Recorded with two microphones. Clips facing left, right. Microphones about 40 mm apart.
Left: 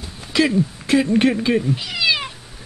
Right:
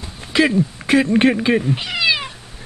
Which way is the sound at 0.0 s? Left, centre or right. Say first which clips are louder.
Right 2 dB; right.